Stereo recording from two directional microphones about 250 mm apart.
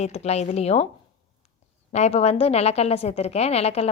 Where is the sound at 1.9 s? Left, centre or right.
Left.